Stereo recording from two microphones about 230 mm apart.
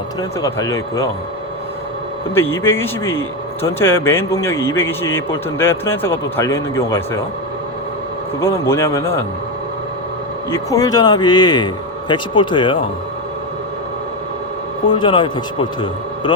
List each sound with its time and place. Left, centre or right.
0.2 s a man's voice: centre
2.3 s a man's voice: centre
8.4 s a man's voice: centre
10.5 s a man's voice: centre
14.8 s a man's voice: left